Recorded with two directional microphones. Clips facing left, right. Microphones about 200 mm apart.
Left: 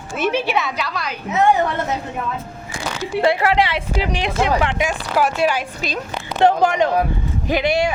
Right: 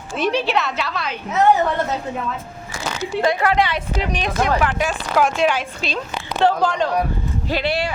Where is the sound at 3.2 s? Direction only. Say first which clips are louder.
Left 2 dB; 25° left (ahead or behind).